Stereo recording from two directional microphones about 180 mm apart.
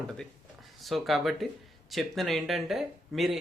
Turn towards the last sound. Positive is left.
turn(degrees=0)  # may be behind; listen again after turning